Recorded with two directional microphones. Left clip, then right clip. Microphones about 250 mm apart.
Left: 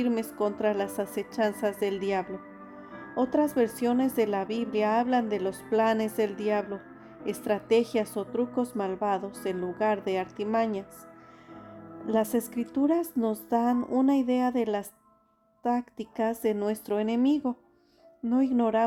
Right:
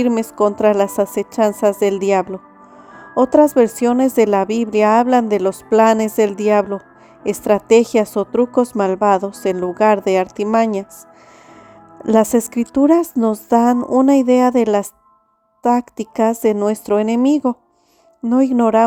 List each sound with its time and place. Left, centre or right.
0.0 s speech: right
12.0 s speech: right